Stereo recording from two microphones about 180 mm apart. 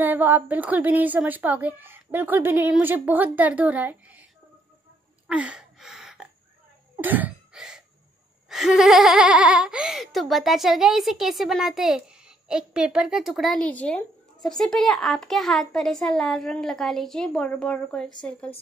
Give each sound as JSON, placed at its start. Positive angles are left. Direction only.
{"t": 0.0, "sound": "a woman's voice", "side_deg": -10}
{"t": 5.3, "sound": "gasp", "side_deg": -5}
{"t": 7.0, "sound": "a sound", "side_deg": -10}
{"t": 8.5, "sound": "speech", "side_deg": 0}